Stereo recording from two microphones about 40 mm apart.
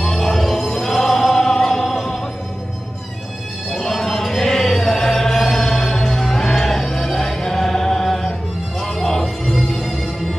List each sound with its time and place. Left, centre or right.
0.0 s music: centre
3.7 s music: centre